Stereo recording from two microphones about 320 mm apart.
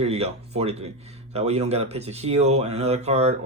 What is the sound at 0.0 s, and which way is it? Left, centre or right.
Speech, centre.